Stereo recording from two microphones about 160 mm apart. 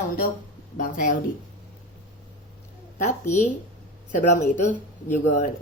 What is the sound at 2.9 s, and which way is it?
Speech, 50° left (ahead or behind).